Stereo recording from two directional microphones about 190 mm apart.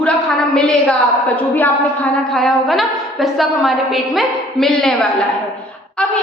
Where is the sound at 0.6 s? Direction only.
5° left (ahead or behind).